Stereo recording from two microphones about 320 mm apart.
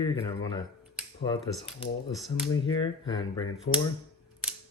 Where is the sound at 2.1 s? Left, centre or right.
Centre.